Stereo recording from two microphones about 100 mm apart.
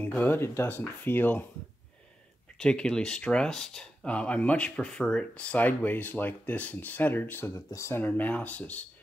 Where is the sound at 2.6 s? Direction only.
10° left (ahead or behind).